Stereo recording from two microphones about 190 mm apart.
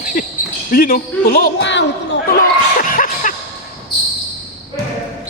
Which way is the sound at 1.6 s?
70° left (ahead or behind).